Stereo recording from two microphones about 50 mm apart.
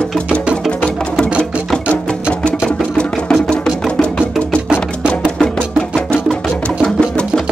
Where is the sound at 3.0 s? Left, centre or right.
Centre.